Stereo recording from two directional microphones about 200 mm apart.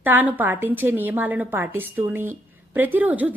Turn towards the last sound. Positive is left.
turn(degrees=-10)  # may be behind; listen again after turning